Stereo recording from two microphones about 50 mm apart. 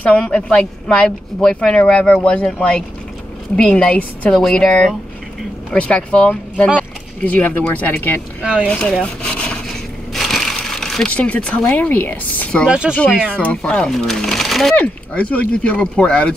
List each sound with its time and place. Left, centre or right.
0.0 s a woman's voice: left
8.6 s speech: left
10.1 s a sound: centre
11.1 s speech: left
11.7 s speech: left
12.6 s speech: centre
13.6 s a woman's voice: centre
14.8 s speech: left